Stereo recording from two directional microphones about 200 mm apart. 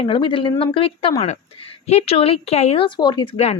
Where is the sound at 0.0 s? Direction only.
25° left (ahead or behind).